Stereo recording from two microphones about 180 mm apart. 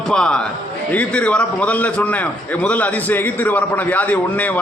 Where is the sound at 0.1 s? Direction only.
5° left (ahead or behind).